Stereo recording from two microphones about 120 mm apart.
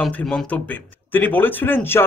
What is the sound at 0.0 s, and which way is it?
Speech, 5° left (ahead or behind).